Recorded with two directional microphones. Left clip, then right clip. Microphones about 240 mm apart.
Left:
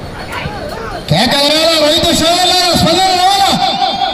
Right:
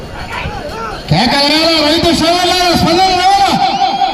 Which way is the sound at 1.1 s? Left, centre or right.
Left.